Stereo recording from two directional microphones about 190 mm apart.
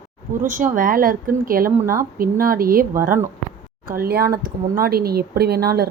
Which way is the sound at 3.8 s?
50° right (ahead or behind).